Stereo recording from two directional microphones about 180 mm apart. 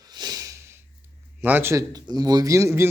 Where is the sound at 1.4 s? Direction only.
10° right (ahead or behind).